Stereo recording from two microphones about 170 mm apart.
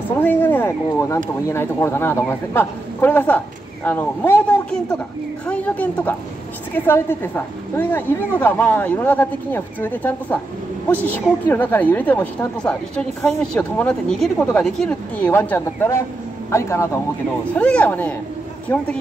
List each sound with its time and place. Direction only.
0.2 s a woman's voice: 10° left (ahead or behind)